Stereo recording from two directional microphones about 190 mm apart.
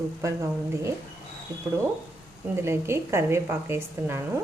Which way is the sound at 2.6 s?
15° right (ahead or behind).